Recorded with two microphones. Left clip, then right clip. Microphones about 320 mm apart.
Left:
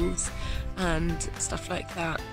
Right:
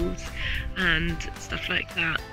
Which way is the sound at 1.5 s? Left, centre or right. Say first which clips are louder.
Right 7 dB; centre.